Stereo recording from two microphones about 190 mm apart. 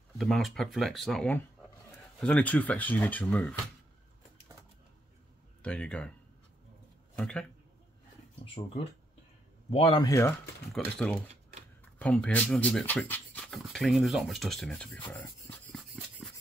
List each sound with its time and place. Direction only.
0.2 s speech: centre (ahead or behind)
5.6 s speech: 5° left (ahead or behind)
7.2 s speech: 5° left (ahead or behind)
8.6 s speech: 35° left (ahead or behind)
10.0 s speech: 15° left (ahead or behind)
10.8 s speech: centre (ahead or behind)
12.0 s speech: 5° left (ahead or behind)